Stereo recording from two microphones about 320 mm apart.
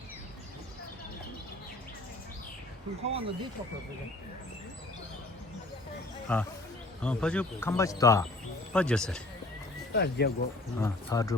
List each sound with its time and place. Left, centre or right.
3.0 s speech: centre
6.3 s speech: centre
9.9 s speech: left
10.8 s speech: centre